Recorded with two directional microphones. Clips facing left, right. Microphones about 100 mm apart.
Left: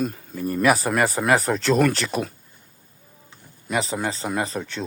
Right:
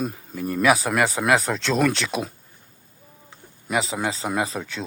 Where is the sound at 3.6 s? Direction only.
5° right (ahead or behind).